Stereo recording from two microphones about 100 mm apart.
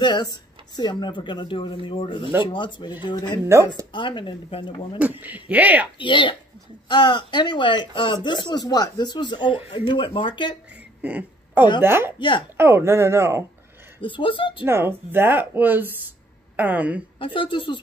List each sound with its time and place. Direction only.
0.0 s speech: 50° left (ahead or behind)
4.9 s speech: 15° right (ahead or behind)
5.9 s speech: 55° left (ahead or behind)
11.0 s a sound: 15° right (ahead or behind)
11.8 s speech: 25° right (ahead or behind)
12.2 s speech: 55° left (ahead or behind)
12.5 s speech: 25° right (ahead or behind)
14.0 s speech: 60° left (ahead or behind)
14.6 s speech: 25° right (ahead or behind)
17.2 s speech: 55° left (ahead or behind)